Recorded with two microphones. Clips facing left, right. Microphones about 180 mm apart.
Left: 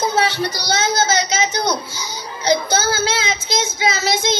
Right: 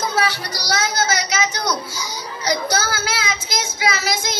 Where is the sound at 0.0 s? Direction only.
25° left (ahead or behind).